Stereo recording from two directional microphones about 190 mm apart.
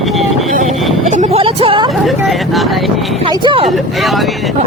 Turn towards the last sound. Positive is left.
turn(degrees=0)  # may be behind; listen again after turning